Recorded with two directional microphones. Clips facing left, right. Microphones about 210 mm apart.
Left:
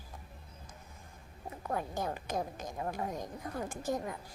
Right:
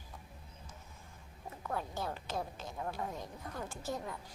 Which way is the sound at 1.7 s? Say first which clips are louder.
Left 3 dB; 15° left (ahead or behind).